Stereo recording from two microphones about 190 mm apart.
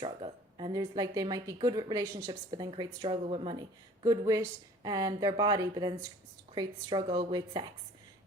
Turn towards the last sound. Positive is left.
turn(degrees=-25)  # may be behind; listen again after turning